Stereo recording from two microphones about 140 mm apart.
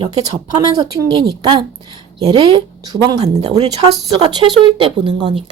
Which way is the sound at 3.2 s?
45° right (ahead or behind).